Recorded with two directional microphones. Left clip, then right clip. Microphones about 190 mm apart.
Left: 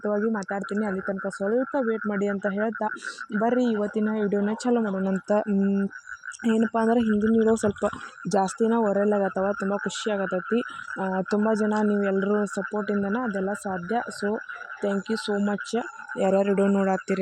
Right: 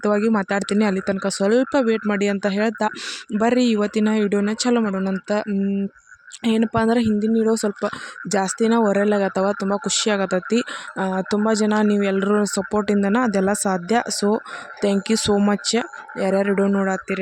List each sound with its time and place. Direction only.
0.0 s speech: 30° right (ahead or behind)
16.1 s speech: 10° right (ahead or behind)